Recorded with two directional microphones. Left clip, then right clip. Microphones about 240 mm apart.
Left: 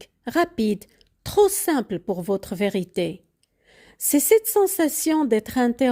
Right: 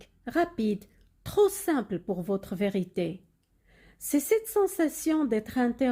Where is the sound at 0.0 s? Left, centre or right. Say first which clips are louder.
Left 6 dB; left.